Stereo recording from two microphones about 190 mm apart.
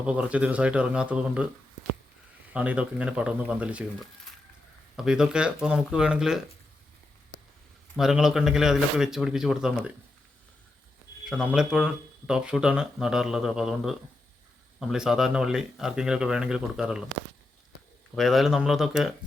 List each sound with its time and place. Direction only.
0.0 s speech: 5° right (ahead or behind)
2.5 s speech: 5° right (ahead or behind)
4.9 s speech: 5° right (ahead or behind)
7.9 s speech: 5° right (ahead or behind)
11.3 s speech: 5° right (ahead or behind)
18.1 s speech: centre (ahead or behind)